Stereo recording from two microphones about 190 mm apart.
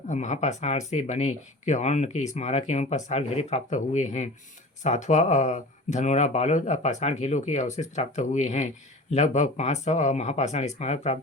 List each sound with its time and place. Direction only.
0.1 s speech: 40° left (ahead or behind)